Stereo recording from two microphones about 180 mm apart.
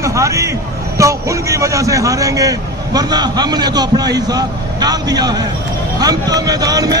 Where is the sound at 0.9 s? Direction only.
15° right (ahead or behind).